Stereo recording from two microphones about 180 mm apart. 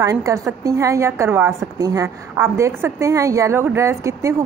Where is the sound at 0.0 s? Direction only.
20° right (ahead or behind).